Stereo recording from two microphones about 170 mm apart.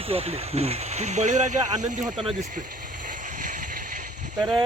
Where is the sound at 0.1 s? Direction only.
35° right (ahead or behind).